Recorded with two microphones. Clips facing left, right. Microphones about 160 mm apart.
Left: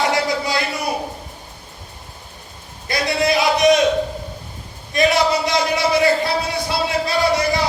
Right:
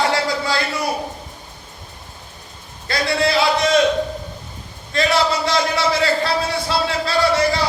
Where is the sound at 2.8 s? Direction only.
20° left (ahead or behind).